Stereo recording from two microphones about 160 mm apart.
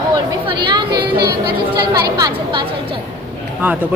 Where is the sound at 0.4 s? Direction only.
30° right (ahead or behind).